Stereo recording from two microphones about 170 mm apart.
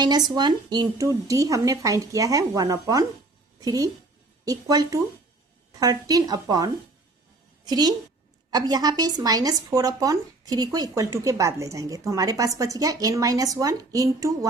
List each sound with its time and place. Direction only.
0.0 s a woman's voice: 25° right (ahead or behind)